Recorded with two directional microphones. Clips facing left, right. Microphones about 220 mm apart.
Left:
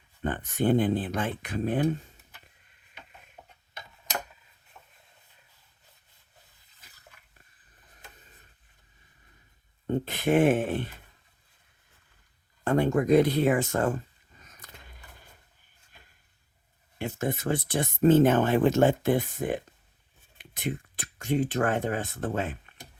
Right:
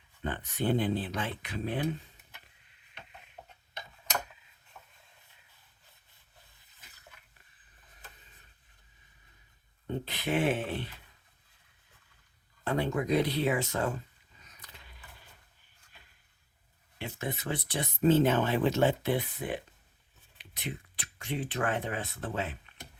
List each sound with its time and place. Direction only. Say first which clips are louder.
0.2 s speech: left 5 dB; 50° left (ahead or behind)
9.8 s speech: left 7 dB; 50° left (ahead or behind)
12.6 s a sound: left 7 dB; 50° left (ahead or behind)
17.0 s speech: left 7 dB; 45° left (ahead or behind)